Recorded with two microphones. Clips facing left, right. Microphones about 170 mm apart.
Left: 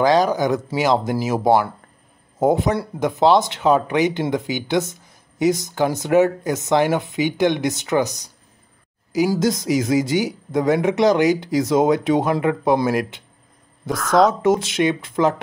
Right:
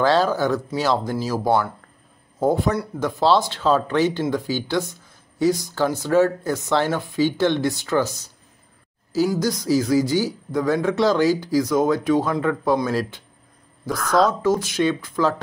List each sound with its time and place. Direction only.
0.0 s speech: 15° left (ahead or behind)
9.3 s speech: 20° left (ahead or behind)
13.8 s a woman's voice: centre (ahead or behind)
14.4 s speech: 25° left (ahead or behind)